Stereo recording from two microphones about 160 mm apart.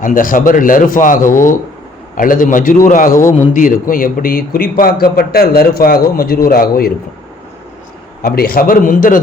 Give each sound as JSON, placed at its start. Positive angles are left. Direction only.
{"t": 0.0, "sound": "a man's voice", "side_deg": 55}
{"t": 3.1, "sound": "a man's voice", "side_deg": 15}
{"t": 3.5, "sound": "a man's voice", "side_deg": 55}
{"t": 8.2, "sound": "a man's voice", "side_deg": 70}